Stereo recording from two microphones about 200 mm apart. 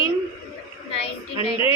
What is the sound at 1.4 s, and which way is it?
Speech, 25° left (ahead or behind).